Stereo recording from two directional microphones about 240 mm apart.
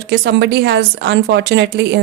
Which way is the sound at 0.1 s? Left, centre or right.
Right.